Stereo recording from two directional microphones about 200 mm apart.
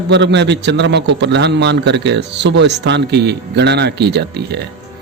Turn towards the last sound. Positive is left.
turn(degrees=-55)  # may be behind; listen again after turning